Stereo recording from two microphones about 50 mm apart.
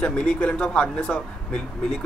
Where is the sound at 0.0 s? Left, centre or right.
Left.